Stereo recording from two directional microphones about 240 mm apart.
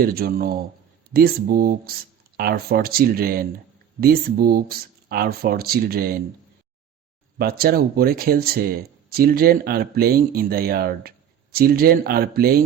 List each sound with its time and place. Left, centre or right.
0.0 s speech: right
7.3 s speech: right